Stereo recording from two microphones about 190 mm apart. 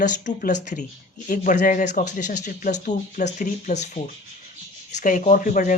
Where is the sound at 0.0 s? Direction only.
40° left (ahead or behind).